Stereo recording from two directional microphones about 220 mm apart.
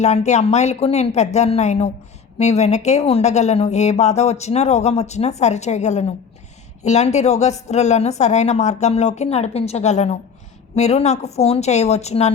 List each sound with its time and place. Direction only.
0.0 s speech: 30° left (ahead or behind)